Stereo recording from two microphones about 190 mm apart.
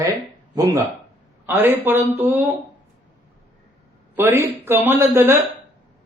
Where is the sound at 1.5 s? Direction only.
10° right (ahead or behind).